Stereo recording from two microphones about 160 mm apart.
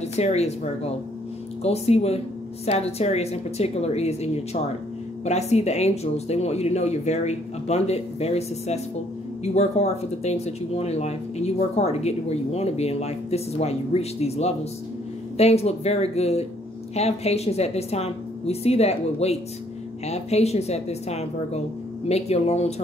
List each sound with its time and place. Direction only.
0.0 s speech: 40° left (ahead or behind)